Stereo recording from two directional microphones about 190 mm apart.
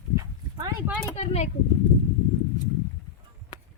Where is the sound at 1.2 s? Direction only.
35° left (ahead or behind).